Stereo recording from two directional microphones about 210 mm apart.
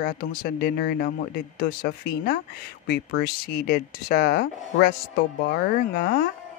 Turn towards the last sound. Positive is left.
turn(degrees=45)  # may be behind; listen again after turning